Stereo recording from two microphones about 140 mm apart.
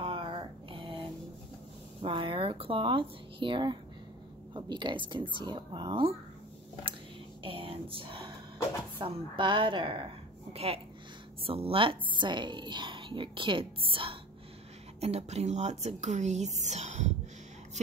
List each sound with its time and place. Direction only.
0.0 s a sound: 40° right (ahead or behind)
2.0 s a woman's voice: 35° right (ahead or behind)
7.4 s a woman's voice: 40° right (ahead or behind); by 17.1 s 55° right (ahead or behind)